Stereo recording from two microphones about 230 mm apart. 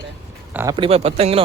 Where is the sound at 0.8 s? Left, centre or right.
Right.